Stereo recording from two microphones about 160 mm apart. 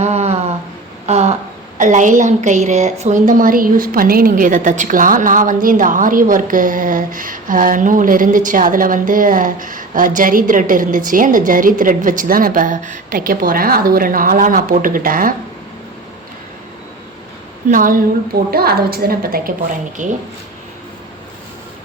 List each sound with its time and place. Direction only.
0.0 s a sound: 45° right (ahead or behind)
1.8 s a woman's voice: 50° right (ahead or behind)
17.7 s a woman's voice: 60° right (ahead or behind)
18.5 s a woman's voice: 75° right (ahead or behind)
20.0 s speech: 50° right (ahead or behind)